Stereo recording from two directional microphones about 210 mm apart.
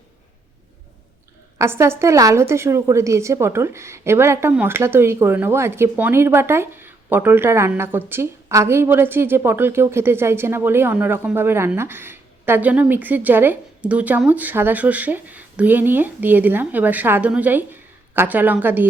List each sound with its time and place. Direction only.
1.5 s a woman's voice: 15° right (ahead or behind)